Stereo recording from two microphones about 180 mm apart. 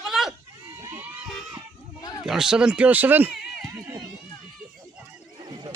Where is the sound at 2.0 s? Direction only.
20° left (ahead or behind).